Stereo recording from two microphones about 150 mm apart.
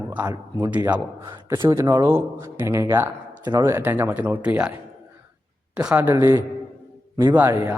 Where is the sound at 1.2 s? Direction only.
20° right (ahead or behind).